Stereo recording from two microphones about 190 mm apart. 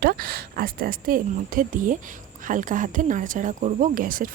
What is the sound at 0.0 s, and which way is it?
Speech, 50° right (ahead or behind).